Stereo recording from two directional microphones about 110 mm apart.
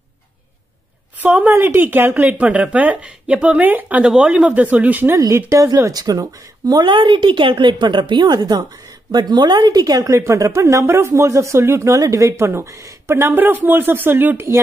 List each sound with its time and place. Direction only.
1.2 s a woman's voice: 15° right (ahead or behind)
5.1 s a woman's voice: 30° right (ahead or behind)
6.9 s a woman's voice: 45° right (ahead or behind); by 14.6 s 20° right (ahead or behind)